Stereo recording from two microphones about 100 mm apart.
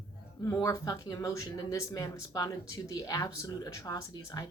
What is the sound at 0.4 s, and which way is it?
Speech, 35° left (ahead or behind).